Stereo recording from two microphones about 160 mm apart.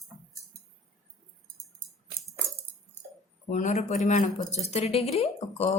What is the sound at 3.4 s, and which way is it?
Speech, 50° left (ahead or behind).